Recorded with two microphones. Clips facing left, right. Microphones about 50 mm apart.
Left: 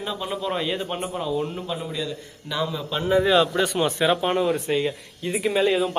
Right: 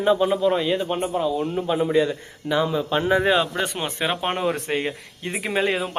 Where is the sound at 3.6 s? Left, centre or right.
Right.